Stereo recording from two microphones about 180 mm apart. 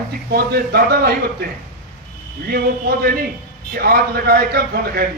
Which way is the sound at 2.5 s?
55° right (ahead or behind).